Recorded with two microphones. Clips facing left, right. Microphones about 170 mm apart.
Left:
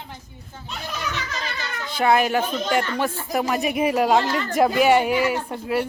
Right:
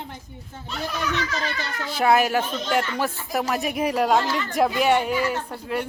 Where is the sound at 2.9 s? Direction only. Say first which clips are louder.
Left 2 dB; centre (ahead or behind).